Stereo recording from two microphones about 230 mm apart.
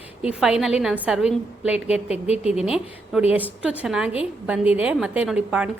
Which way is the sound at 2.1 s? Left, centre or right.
Left.